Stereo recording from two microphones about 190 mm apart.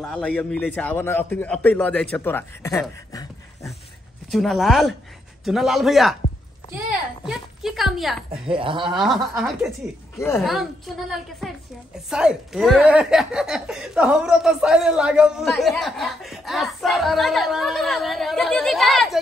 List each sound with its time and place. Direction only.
0.0 s a man's voice: 5° left (ahead or behind)
4.3 s a woman's voice: centre (ahead or behind)
8.3 s speech: 25° right (ahead or behind)
8.9 s speech: centre (ahead or behind)